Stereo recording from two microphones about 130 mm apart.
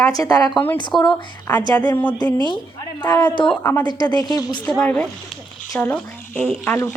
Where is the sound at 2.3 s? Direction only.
35° right (ahead or behind).